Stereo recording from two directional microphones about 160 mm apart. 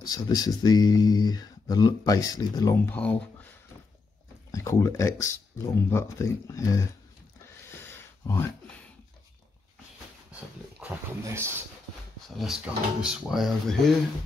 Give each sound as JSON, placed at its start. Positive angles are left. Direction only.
{"t": 0.0, "sound": "speech", "side_deg": 25}
{"t": 7.8, "sound": "a sound", "side_deg": 15}
{"t": 10.8, "sound": "speech", "side_deg": -15}
{"t": 12.4, "sound": "speech", "side_deg": -5}